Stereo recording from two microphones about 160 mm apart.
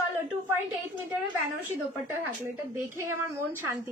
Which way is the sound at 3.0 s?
15° right (ahead or behind).